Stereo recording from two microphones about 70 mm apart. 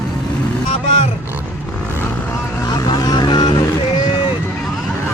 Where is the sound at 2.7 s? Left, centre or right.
Left.